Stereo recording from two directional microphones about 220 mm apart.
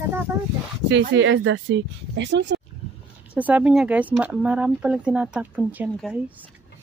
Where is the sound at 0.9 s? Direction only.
55° right (ahead or behind).